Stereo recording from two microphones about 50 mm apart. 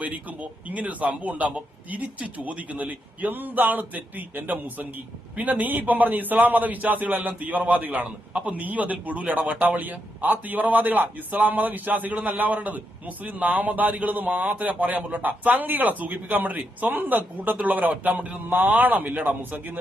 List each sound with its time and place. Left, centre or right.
0.0 s a man's voice: right